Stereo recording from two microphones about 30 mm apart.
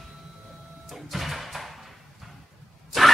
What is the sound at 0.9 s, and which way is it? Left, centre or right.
Music, centre.